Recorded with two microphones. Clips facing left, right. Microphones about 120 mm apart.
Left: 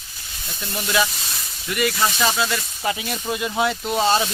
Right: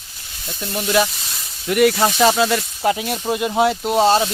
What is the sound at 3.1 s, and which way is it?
Speech, 30° right (ahead or behind).